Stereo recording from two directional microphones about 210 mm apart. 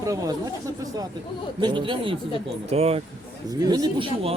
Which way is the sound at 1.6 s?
25° right (ahead or behind).